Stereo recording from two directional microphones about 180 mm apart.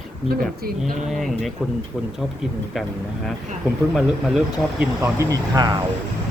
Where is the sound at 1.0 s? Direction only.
Centre (ahead or behind).